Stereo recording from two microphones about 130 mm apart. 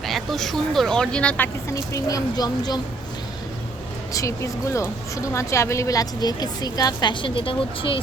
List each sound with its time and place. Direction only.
0.0 s speech: centre (ahead or behind)
1.7 s a woman's voice: 25° left (ahead or behind)
4.1 s a woman's voice: 25° left (ahead or behind); by 8.0 s 45° left (ahead or behind)